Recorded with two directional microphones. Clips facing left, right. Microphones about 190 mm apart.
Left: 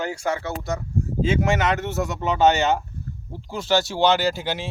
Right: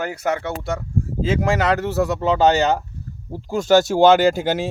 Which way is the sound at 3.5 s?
45° right (ahead or behind).